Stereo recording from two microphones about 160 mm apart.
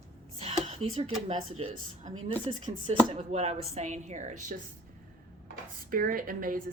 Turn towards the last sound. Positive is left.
turn(degrees=-60)  # may be behind; listen again after turning